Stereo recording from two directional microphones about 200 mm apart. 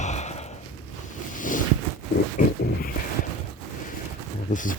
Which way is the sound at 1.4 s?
40° left (ahead or behind).